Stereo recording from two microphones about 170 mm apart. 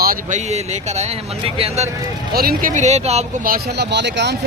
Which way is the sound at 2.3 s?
60° right (ahead or behind).